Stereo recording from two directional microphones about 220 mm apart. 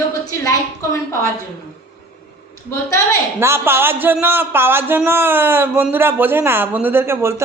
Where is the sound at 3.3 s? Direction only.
10° right (ahead or behind).